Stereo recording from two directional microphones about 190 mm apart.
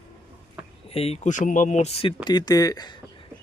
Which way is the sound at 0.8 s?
30° left (ahead or behind).